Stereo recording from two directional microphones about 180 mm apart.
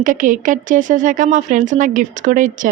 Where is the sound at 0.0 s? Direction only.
45° right (ahead or behind).